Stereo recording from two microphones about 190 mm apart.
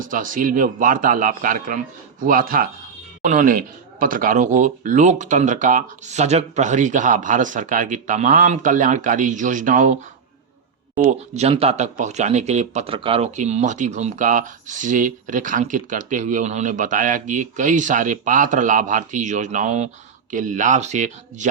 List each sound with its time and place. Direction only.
0.0 s a man's voice: 45° right (ahead or behind)
10.9 s speech: 40° right (ahead or behind)